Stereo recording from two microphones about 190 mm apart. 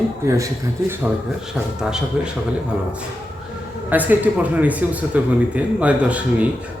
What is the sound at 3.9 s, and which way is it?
A man's voice, 10° right (ahead or behind).